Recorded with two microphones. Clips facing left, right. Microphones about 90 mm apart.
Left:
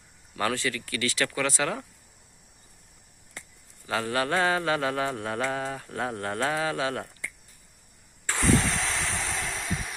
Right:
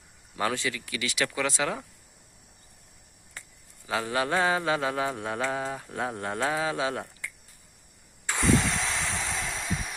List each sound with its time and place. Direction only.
0.3 s mantra: 15° right (ahead or behind)
3.8 s mantra: 10° right (ahead or behind)
8.3 s a sound: 20° right (ahead or behind)